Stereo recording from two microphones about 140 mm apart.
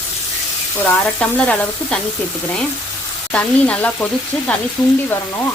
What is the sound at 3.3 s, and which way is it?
Speech, 10° left (ahead or behind).